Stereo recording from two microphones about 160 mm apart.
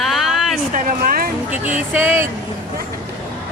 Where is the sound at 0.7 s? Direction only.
60° right (ahead or behind).